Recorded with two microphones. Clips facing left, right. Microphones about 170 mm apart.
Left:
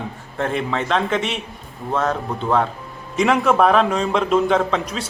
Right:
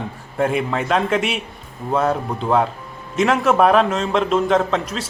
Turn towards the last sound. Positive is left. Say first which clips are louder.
# right 1 dB
turn(degrees=0)  # may be behind; listen again after turning